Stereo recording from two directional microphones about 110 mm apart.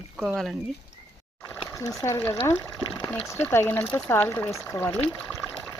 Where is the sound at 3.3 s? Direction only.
20° left (ahead or behind).